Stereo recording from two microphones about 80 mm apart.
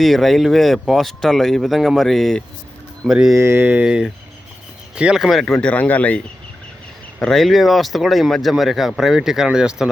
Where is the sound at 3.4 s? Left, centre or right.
Right.